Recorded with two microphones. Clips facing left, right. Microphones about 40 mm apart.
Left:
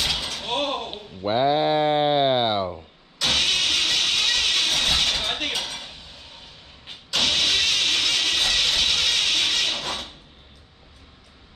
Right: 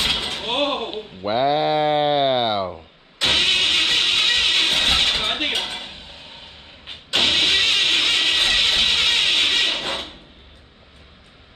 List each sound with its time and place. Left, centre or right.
0.0 s door: right
1.8 s a sound: right
3.2 s vehicle: right